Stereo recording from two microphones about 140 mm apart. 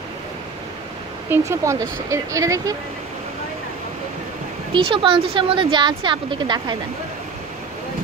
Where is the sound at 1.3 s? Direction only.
20° right (ahead or behind).